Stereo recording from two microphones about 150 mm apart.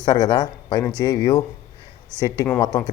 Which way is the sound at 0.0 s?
25° left (ahead or behind).